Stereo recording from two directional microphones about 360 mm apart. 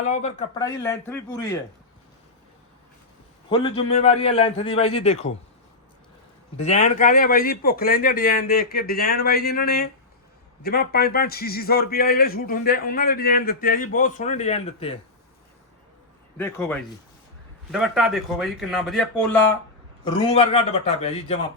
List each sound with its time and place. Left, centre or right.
0.0 s a man's voice: centre
3.5 s a man's voice: centre
6.6 s a man's voice: centre
16.4 s a man's voice: centre